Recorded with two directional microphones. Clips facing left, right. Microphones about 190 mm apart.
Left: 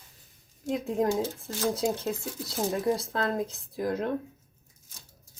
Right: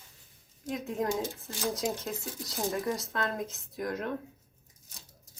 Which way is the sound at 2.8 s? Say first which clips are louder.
Left 5 dB; 30° left (ahead or behind).